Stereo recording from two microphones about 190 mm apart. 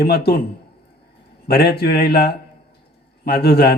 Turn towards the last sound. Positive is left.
turn(degrees=55)  # may be behind; listen again after turning